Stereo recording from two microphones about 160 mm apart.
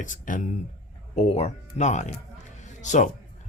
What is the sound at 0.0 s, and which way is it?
Speech, 55° left (ahead or behind).